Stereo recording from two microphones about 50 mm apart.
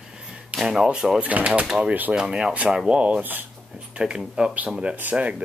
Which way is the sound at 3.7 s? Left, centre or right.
Centre.